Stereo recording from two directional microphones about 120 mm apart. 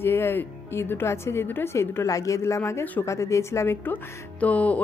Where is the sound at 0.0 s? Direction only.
20° left (ahead or behind).